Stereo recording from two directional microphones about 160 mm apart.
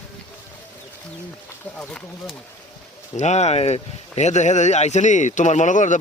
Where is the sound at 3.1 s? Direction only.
45° left (ahead or behind).